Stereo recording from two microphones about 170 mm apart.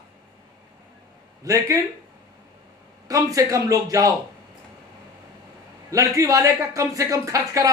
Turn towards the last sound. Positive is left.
turn(degrees=-20)  # may be behind; listen again after turning